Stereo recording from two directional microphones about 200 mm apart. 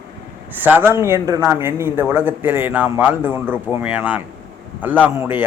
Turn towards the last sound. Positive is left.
turn(degrees=-10)  # may be behind; listen again after turning